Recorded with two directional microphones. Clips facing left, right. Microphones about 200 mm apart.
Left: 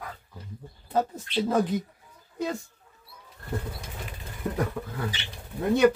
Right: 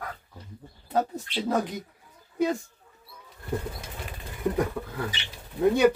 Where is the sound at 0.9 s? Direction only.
5° right (ahead or behind).